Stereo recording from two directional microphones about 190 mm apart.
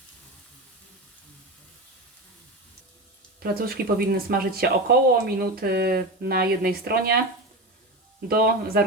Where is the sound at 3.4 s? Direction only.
55° right (ahead or behind).